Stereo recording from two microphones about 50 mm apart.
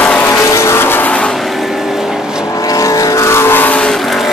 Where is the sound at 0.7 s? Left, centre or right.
Left.